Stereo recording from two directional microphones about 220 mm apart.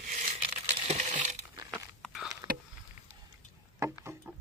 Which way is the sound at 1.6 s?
5° left (ahead or behind).